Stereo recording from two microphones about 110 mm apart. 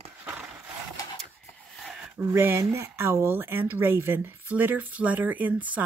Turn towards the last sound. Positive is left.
turn(degrees=-15)  # may be behind; listen again after turning